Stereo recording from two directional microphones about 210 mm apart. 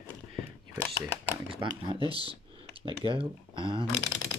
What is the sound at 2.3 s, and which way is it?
Computer keyboard, 25° right (ahead or behind).